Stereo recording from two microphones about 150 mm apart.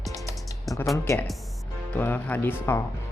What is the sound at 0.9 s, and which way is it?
Speech, 20° left (ahead or behind).